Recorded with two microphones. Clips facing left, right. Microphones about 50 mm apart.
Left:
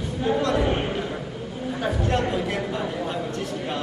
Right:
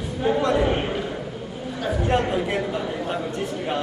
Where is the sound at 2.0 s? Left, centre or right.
Centre.